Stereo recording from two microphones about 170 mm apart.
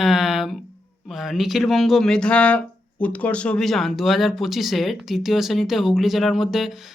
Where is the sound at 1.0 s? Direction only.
Centre (ahead or behind).